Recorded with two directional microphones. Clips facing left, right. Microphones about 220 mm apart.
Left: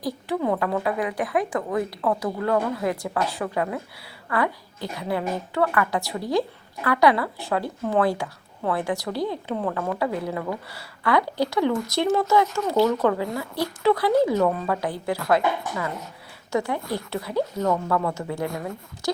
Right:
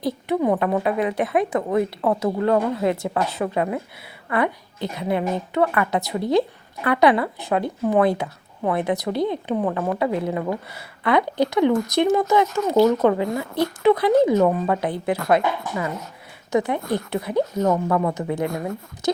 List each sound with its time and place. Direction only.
0.0 s speech: 20° right (ahead or behind)
16.5 s speech: 20° right (ahead or behind)
19.0 s a sound: 20° right (ahead or behind)